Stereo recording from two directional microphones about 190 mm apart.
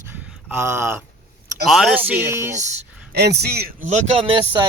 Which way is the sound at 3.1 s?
60° right (ahead or behind).